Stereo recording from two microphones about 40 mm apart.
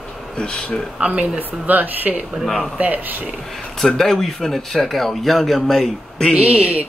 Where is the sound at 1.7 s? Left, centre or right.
Right.